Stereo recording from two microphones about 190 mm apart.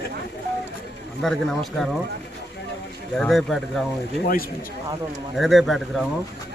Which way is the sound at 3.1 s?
Centre (ahead or behind).